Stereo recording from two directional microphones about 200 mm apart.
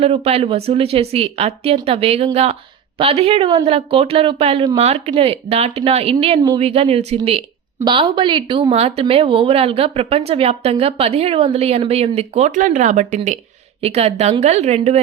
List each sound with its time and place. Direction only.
0.0 s a woman's voice: 30° right (ahead or behind)